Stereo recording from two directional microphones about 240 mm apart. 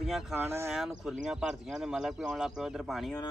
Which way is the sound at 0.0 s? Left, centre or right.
Centre.